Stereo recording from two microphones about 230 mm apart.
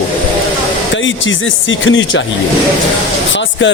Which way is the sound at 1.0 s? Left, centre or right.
Left.